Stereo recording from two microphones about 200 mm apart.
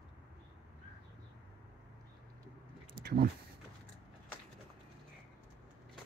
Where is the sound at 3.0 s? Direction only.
55° right (ahead or behind).